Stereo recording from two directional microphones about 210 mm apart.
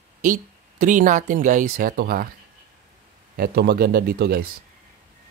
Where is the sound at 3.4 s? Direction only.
50° right (ahead or behind).